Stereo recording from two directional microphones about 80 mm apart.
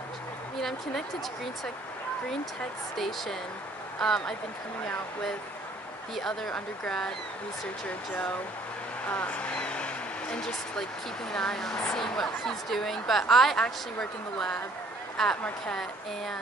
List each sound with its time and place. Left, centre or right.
0.6 s a woman's voice: centre
3.0 s a woman's voice: centre
6.1 s a woman's voice: centre
9.0 s a woman's voice: centre